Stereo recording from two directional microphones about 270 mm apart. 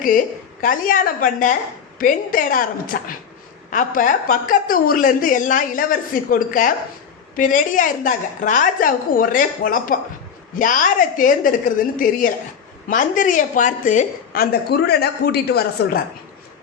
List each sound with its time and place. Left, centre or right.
0.6 s a woman's voice: left